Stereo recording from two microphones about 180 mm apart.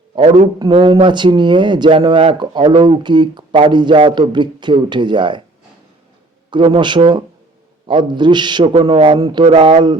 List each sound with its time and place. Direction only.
0.7 s speech: 30° right (ahead or behind)
6.5 s speech: 25° right (ahead or behind)